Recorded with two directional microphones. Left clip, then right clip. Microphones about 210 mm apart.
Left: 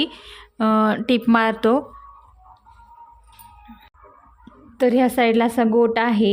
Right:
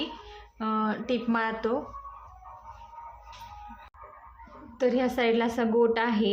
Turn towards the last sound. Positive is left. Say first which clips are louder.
# left 6 dB
turn(degrees=40)  # may be behind; listen again after turning